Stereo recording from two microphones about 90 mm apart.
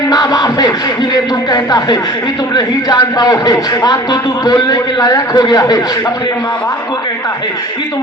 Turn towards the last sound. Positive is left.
turn(degrees=40)  # may be behind; listen again after turning